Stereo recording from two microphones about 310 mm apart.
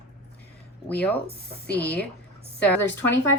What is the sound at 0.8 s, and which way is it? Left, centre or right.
Speech, centre.